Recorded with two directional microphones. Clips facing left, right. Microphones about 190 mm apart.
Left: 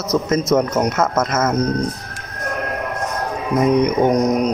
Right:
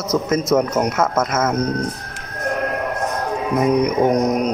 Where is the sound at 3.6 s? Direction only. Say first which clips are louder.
Left 2 dB; 5° right (ahead or behind).